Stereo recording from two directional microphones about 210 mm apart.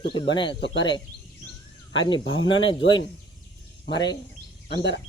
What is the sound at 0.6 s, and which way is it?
Speech, 55° left (ahead or behind).